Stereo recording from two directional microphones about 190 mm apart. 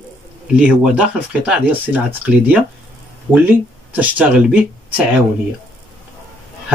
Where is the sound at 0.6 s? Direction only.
5° right (ahead or behind).